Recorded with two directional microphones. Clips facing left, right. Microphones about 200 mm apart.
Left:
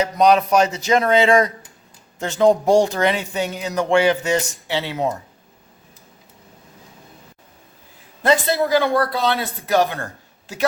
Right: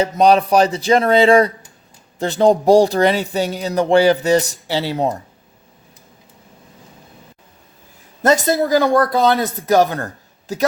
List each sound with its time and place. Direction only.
0.0 s speech: 30° right (ahead or behind)
8.2 s a woman's voice: 45° right (ahead or behind)